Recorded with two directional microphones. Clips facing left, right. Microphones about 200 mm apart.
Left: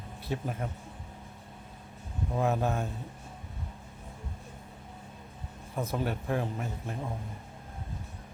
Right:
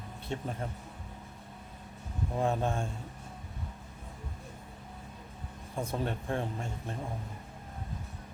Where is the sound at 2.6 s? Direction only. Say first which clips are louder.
Left 2 dB; 30° right (ahead or behind).